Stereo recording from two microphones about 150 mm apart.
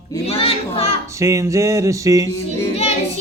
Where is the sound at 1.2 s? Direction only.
20° right (ahead or behind).